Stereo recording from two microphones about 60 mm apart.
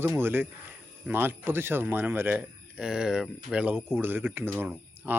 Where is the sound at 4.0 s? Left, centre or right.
Right.